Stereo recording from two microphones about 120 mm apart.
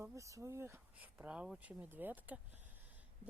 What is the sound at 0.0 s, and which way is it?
Speech, 25° right (ahead or behind).